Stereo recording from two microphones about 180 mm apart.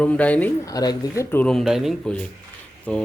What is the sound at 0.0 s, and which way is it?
Speech, 5° left (ahead or behind).